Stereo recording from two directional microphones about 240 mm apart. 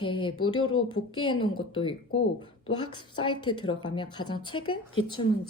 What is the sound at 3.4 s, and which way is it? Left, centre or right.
Speech, centre.